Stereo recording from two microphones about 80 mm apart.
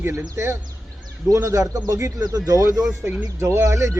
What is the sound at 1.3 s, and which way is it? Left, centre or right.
Speech, right.